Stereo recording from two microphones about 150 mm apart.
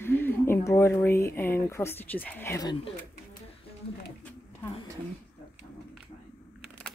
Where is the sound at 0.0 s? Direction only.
15° left (ahead or behind).